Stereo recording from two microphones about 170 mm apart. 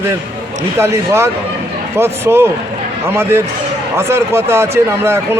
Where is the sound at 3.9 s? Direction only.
15° right (ahead or behind).